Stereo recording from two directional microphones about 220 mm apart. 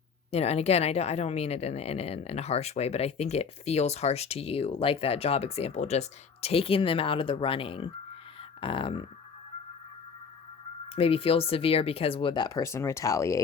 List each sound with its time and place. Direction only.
0.3 s speech: 30° left (ahead or behind)
10.9 s speech: 25° left (ahead or behind)